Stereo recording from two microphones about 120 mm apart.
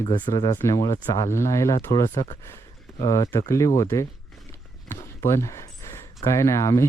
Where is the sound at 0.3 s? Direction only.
40° left (ahead or behind).